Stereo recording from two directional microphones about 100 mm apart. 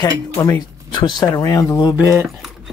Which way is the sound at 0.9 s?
50° left (ahead or behind).